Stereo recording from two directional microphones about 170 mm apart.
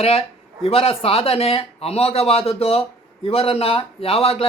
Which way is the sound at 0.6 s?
35° left (ahead or behind).